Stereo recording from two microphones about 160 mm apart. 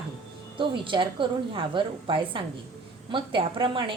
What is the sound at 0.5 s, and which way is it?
A woman's voice, 30° right (ahead or behind).